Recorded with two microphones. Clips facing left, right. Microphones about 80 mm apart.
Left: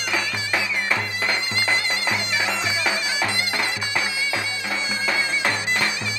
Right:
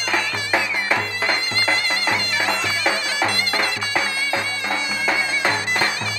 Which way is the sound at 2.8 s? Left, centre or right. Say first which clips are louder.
Right 3 dB; centre.